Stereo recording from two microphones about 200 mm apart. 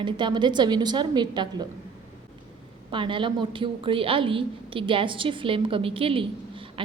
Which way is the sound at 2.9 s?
25° right (ahead or behind).